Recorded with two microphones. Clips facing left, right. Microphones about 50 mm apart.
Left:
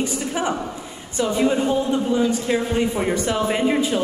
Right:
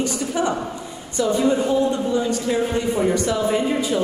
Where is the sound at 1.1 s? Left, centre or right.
Left.